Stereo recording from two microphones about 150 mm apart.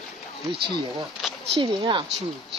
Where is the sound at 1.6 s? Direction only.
35° right (ahead or behind).